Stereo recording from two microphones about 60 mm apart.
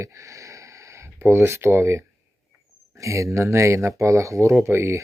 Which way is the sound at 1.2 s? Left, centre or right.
Right.